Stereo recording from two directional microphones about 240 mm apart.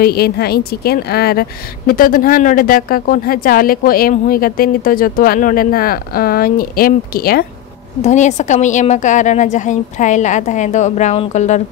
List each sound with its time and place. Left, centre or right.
0.0 s a woman's voice: left